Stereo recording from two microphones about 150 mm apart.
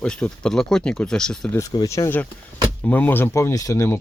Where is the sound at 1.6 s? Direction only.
20° left (ahead or behind).